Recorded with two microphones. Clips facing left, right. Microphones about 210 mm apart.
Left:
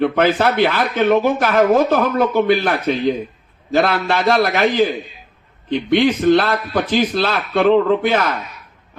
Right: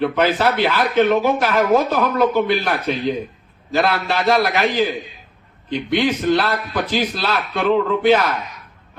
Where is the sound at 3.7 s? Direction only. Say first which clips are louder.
Left 2 dB; 50° left (ahead or behind).